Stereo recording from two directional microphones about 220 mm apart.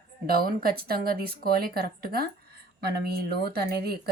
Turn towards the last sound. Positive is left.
turn(degrees=-45)  # may be behind; listen again after turning